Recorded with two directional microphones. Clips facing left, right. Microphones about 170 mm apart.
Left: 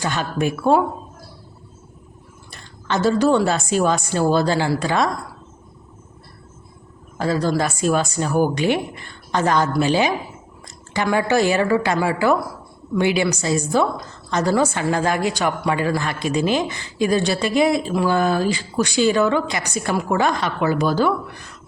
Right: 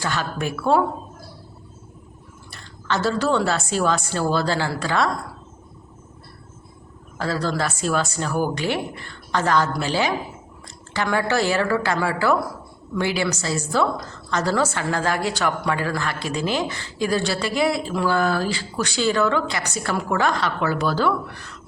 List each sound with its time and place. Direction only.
0.0 s speech: 20° left (ahead or behind)
2.5 s speech: 15° left (ahead or behind)
7.2 s speech: 15° left (ahead or behind)